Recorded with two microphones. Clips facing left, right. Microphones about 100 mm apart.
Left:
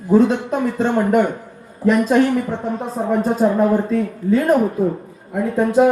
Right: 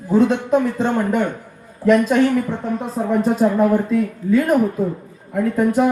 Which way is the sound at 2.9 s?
25° left (ahead or behind).